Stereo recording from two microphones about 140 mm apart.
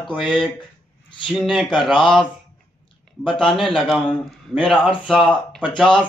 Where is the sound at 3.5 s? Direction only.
Centre (ahead or behind).